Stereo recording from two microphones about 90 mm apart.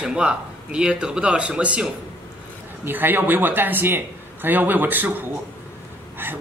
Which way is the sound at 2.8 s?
25° right (ahead or behind).